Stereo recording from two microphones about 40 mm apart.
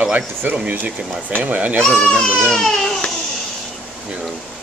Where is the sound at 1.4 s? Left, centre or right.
Right.